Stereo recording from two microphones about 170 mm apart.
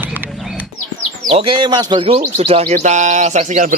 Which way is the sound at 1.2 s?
35° right (ahead or behind).